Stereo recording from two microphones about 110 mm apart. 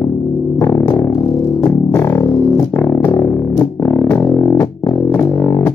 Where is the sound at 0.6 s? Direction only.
20° left (ahead or behind).